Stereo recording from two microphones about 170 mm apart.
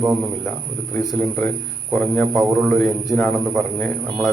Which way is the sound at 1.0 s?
Centre (ahead or behind).